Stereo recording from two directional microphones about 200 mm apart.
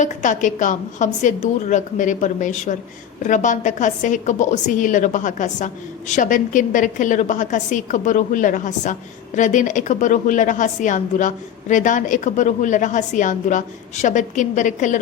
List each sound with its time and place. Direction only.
0.0 s a woman's voice: 40° left (ahead or behind)